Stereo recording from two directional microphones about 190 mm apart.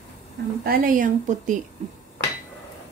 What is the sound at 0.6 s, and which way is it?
Speech, 50° right (ahead or behind).